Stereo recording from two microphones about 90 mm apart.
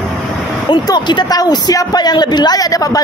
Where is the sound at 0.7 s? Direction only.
55° left (ahead or behind).